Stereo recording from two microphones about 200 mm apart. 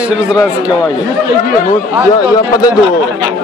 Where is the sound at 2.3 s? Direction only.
20° left (ahead or behind).